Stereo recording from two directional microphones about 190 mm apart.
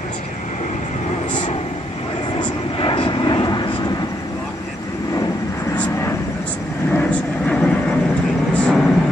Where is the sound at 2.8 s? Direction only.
25° left (ahead or behind).